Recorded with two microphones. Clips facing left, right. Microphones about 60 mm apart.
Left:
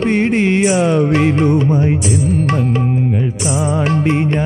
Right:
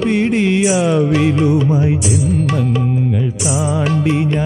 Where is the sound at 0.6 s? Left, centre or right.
Left.